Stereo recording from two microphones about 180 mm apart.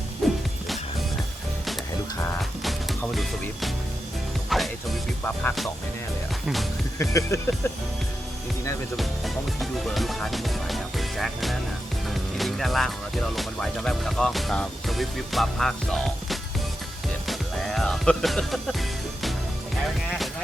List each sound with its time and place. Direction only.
0.2 s music: centre (ahead or behind)
2.4 s music: centre (ahead or behind)
4.4 s music: centre (ahead or behind)
7.0 s speech: 15° left (ahead or behind)
9.0 s speech: centre (ahead or behind)
12.0 s music: centre (ahead or behind)
13.3 s speech: centre (ahead or behind)
17.2 s music: centre (ahead or behind)